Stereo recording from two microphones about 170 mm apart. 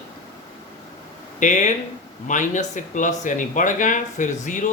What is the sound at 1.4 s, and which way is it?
A man's voice, 45° left (ahead or behind).